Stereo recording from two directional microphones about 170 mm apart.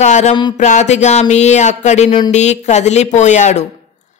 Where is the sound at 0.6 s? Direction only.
45° left (ahead or behind).